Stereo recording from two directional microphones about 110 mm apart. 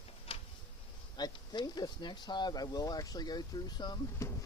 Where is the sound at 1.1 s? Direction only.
40° left (ahead or behind).